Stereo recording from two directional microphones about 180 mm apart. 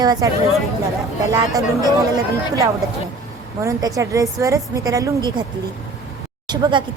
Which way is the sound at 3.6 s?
20° right (ahead or behind).